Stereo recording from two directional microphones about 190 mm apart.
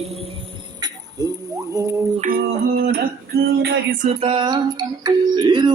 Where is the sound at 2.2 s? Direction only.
50° right (ahead or behind).